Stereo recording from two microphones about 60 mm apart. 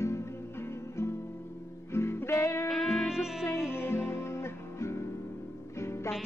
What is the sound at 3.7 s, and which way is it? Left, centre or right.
Music, left.